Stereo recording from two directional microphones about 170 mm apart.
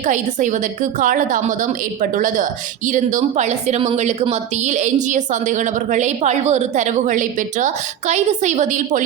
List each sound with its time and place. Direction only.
0.0 s a woman's voice: 45° right (ahead or behind)